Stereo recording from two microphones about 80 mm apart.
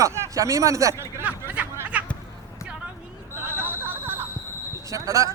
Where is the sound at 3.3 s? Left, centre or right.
Right.